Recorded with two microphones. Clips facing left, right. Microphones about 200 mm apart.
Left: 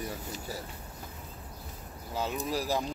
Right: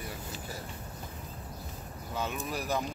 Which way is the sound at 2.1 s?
35° left (ahead or behind).